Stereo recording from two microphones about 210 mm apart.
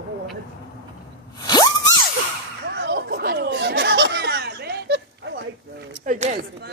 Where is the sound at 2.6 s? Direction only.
55° right (ahead or behind).